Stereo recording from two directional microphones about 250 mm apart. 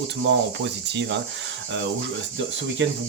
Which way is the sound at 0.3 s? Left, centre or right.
Right.